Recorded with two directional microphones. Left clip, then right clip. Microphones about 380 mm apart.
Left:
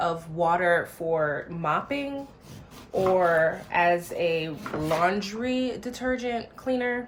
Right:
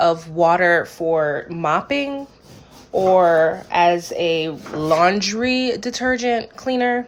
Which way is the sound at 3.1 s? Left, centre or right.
Right.